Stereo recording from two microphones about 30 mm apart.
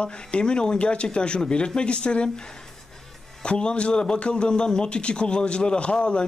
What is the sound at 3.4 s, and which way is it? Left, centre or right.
A man's voice, left.